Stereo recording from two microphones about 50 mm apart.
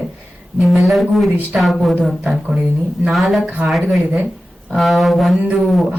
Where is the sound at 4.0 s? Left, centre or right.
Right.